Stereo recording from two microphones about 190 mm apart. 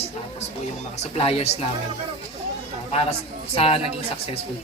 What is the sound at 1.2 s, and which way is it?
Speech, 30° left (ahead or behind).